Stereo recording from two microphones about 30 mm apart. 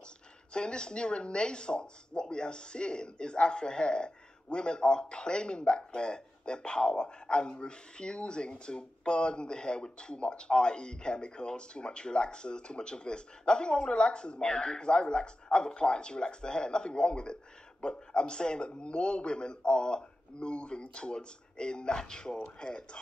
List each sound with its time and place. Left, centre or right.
0.5 s speech: left